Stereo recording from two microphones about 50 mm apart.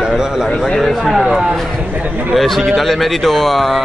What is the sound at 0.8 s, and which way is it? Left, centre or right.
Speech, centre.